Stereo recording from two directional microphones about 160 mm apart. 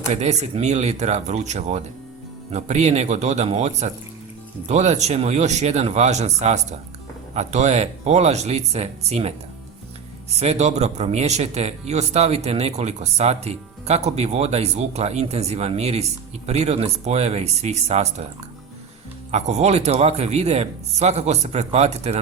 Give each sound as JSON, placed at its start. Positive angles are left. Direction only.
{"t": 0.1, "sound": "speech", "side_deg": -45}
{"t": 10.4, "sound": "speech", "side_deg": -45}
{"t": 19.3, "sound": "speech", "side_deg": -45}